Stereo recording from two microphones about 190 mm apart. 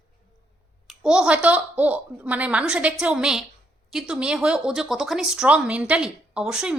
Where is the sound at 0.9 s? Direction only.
5° right (ahead or behind).